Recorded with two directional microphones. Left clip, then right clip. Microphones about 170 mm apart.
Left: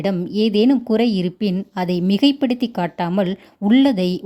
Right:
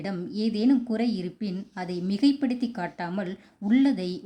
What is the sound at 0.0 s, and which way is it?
Speech, 50° left (ahead or behind).